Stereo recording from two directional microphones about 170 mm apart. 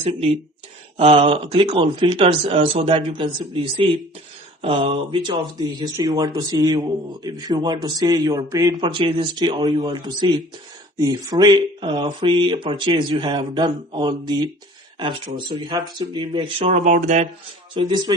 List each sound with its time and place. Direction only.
0.0 s speech: 35° right (ahead or behind)
16.8 s speech: 50° right (ahead or behind)
17.7 s speech: 25° right (ahead or behind)